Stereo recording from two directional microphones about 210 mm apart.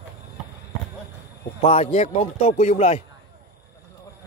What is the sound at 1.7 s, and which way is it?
Speech, 30° left (ahead or behind).